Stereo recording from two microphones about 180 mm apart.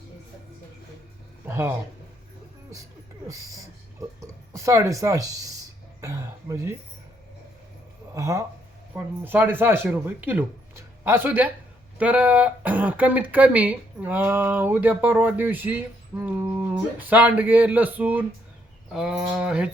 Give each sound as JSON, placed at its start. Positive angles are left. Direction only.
{"t": 1.5, "sound": "speech", "side_deg": -15}
{"t": 4.2, "sound": "speech", "side_deg": -15}
{"t": 6.0, "sound": "throat clearing", "side_deg": -20}
{"t": 8.1, "sound": "speech", "side_deg": -15}